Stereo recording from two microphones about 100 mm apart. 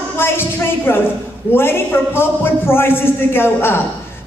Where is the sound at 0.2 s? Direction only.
25° left (ahead or behind).